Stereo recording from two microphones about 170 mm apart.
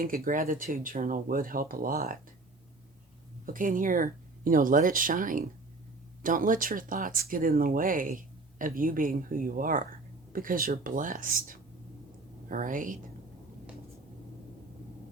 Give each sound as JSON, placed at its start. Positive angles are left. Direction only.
{"t": 0.0, "sound": "speech", "side_deg": -55}
{"t": 3.4, "sound": "speech", "side_deg": -50}